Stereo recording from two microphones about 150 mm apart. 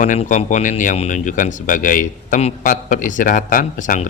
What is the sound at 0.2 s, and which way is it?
Speech, 55° left (ahead or behind).